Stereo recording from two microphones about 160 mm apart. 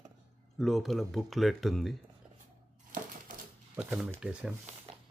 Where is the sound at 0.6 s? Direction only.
Centre (ahead or behind).